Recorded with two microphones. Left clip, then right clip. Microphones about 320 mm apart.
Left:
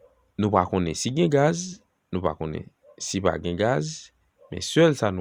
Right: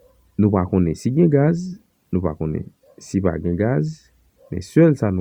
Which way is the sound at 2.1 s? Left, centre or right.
Centre.